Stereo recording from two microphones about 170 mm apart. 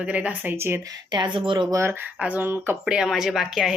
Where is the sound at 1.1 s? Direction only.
25° right (ahead or behind).